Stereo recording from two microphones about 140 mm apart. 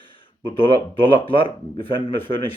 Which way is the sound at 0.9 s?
40° left (ahead or behind).